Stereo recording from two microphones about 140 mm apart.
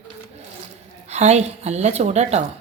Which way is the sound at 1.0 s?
50° right (ahead or behind).